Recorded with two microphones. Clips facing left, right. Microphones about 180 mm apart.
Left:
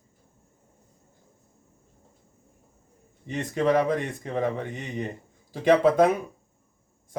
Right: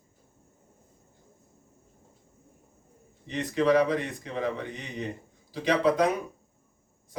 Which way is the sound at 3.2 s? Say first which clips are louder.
Left 1 dB; 50° left (ahead or behind).